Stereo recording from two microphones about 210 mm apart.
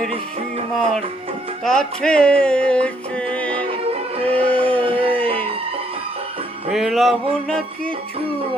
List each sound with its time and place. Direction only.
0.1 s music: 25° right (ahead or behind)
1.6 s music: 5° left (ahead or behind)
4.8 s a sound: 25° right (ahead or behind)
6.7 s music: centre (ahead or behind)